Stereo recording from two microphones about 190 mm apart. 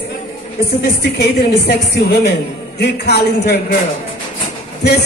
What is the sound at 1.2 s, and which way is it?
A man's voice, 60° left (ahead or behind).